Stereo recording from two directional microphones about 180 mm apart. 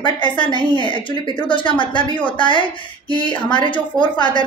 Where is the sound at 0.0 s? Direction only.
25° left (ahead or behind).